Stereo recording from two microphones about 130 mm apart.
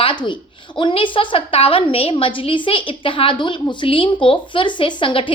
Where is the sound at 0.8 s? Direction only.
40° left (ahead or behind).